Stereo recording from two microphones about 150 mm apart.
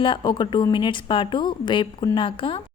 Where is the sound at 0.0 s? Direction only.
35° left (ahead or behind).